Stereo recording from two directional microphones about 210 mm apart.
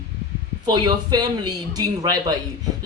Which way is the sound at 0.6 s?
20° right (ahead or behind).